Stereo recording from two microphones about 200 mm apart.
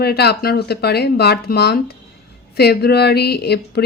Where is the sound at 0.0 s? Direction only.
50° left (ahead or behind).